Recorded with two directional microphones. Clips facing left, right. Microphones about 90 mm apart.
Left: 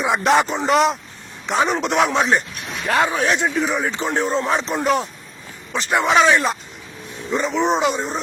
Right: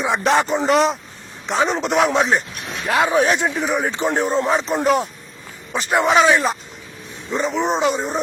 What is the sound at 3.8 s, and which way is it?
Speech, 15° right (ahead or behind).